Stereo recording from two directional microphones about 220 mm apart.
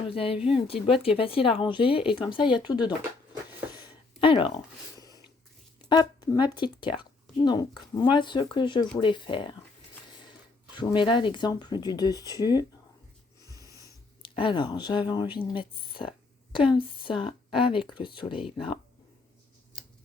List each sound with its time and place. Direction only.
0.1 s speech: 25° left (ahead or behind)
3.8 s a sound: 20° left (ahead or behind)
5.9 s speech: 20° left (ahead or behind)
10.8 s speech: 20° left (ahead or behind)
14.2 s speech: 25° left (ahead or behind)